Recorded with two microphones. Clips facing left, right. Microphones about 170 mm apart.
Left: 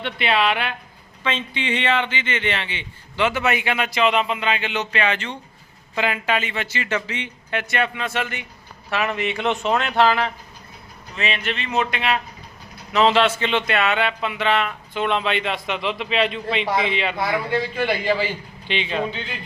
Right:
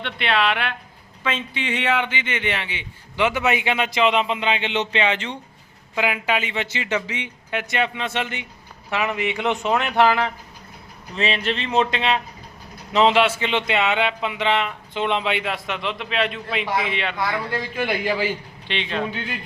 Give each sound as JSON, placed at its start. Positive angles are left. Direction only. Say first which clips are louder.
{"t": 0.0, "sound": "a man's voice", "louder": "left 1 dB", "side_deg": 0}
{"t": 11.1, "sound": "a man's voice", "louder": "right 3 dB", "side_deg": -30}
{"t": 13.1, "sound": "a man's voice", "louder": "even", "side_deg": -10}
{"t": 17.2, "sound": "a man's voice", "louder": "left 3 dB", "side_deg": 10}
{"t": 17.7, "sound": "a man's voice", "louder": "right 1 dB", "side_deg": -10}
{"t": 18.7, "sound": "speech", "louder": "left 2 dB", "side_deg": 5}